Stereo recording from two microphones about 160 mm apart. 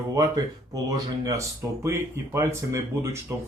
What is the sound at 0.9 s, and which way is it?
Speech, 20° right (ahead or behind).